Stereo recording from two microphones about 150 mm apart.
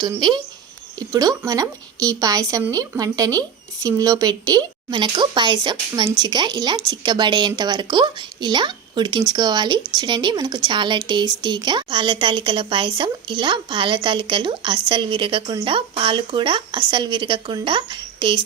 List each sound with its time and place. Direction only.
0.0 s speech: 30° right (ahead or behind)